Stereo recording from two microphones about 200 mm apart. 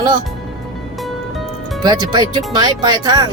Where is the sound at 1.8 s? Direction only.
20° right (ahead or behind).